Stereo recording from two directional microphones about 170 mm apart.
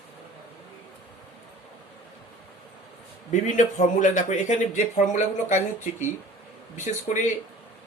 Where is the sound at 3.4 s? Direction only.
45° left (ahead or behind).